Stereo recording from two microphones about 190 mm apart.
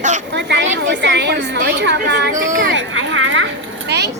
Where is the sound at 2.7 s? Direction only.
80° right.